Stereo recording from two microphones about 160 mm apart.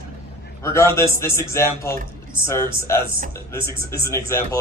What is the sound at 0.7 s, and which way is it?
A man's voice, 15° left (ahead or behind).